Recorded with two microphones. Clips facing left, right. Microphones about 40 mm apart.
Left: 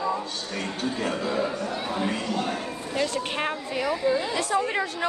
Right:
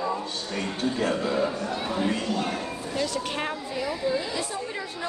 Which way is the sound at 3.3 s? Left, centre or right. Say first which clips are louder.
Left 2 dB; left.